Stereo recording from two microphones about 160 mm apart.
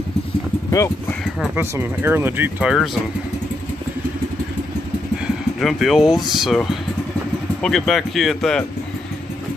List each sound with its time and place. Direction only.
0.7 s speech: 20° left (ahead or behind)
1.2 s speech: 5° right (ahead or behind)
1.6 s speech: 15° right (ahead or behind)
5.2 s speech: centre (ahead or behind)